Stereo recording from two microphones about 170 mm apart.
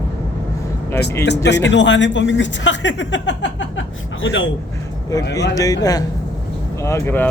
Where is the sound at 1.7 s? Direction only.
90° left.